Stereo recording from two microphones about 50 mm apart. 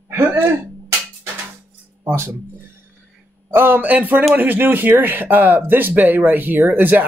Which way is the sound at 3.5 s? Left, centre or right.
Right.